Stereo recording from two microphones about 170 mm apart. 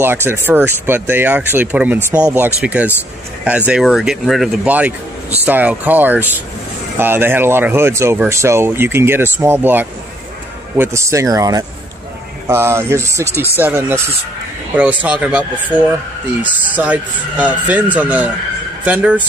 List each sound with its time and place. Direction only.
0.0 s speech: 15° right (ahead or behind)